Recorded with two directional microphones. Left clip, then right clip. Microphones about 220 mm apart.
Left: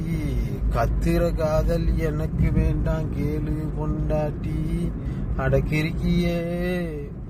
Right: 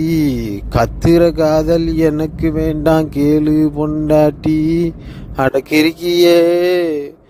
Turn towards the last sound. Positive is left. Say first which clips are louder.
# right 15 dB
turn(degrees=-45)  # may be behind; listen again after turning